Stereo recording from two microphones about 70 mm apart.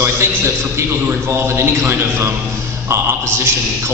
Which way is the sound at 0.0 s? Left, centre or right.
Right.